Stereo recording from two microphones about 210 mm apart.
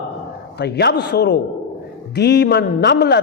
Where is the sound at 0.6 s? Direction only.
55° left (ahead or behind).